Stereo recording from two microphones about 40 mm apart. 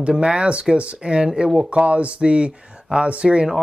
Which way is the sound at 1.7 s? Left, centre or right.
Right.